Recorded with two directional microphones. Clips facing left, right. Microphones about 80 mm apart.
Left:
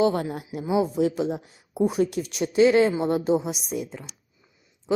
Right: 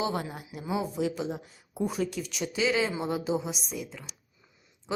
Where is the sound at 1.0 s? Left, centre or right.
Centre.